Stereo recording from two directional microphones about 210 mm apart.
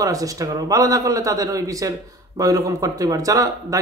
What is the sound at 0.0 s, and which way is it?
A man's voice, 15° right (ahead or behind).